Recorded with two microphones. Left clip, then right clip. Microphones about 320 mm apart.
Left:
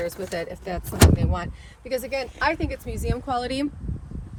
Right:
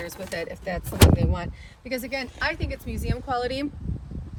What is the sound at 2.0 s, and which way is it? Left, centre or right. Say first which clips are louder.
Speech: left 3 dB; centre.